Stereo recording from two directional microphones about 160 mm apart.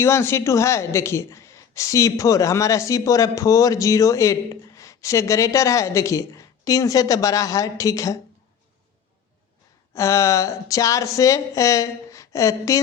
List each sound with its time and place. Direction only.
0.0 s a woman's voice: 15° left (ahead or behind)
9.9 s a woman's voice: 20° left (ahead or behind)